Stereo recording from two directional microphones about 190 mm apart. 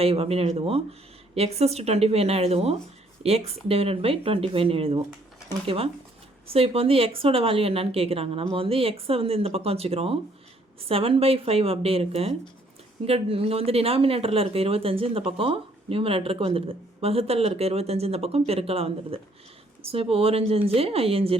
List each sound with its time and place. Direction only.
0.0 s speech: 30° right (ahead or behind)